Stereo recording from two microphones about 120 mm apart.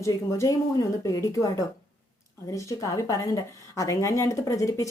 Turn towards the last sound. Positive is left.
turn(degrees=25)  # may be behind; listen again after turning